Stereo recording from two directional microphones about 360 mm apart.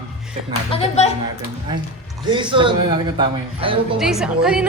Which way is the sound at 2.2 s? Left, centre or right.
Centre.